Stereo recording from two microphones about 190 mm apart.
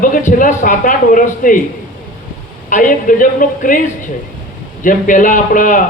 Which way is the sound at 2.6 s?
45° left (ahead or behind).